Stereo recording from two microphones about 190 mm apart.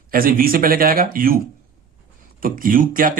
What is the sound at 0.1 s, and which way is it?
Speech, 50° right (ahead or behind).